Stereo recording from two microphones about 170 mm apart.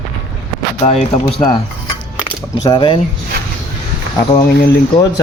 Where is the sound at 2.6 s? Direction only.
25° left (ahead or behind).